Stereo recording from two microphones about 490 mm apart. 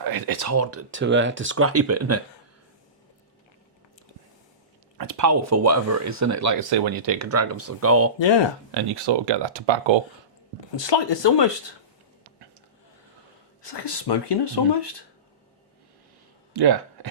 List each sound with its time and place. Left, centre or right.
0.0 s speech: right
4.9 s speech: right
6.7 s speech: right
7.3 s speech: right
8.2 s speech: left
8.7 s speech: right
10.8 s speech: left
13.6 s speech: left
16.5 s a sound: right